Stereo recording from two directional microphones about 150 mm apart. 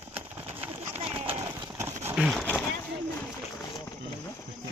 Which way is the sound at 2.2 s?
Centre (ahead or behind).